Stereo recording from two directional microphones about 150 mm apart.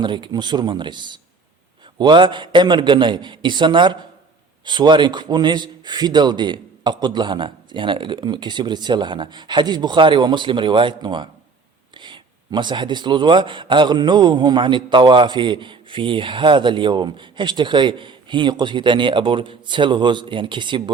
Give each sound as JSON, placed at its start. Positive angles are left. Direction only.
{"t": 0.0, "sound": "speech", "side_deg": -30}